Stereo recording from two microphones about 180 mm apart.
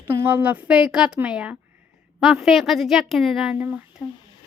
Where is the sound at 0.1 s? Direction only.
15° right (ahead or behind).